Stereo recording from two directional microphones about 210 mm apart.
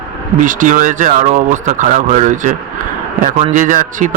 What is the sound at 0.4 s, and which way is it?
Speech, 40° right (ahead or behind).